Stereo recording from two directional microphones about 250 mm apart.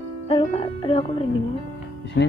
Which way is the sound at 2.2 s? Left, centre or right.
Left.